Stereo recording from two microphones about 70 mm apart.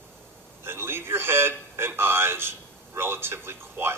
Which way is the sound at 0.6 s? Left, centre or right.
Right.